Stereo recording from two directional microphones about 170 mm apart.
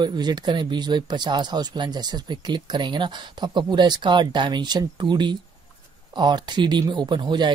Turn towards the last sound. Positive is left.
turn(degrees=-25)  # may be behind; listen again after turning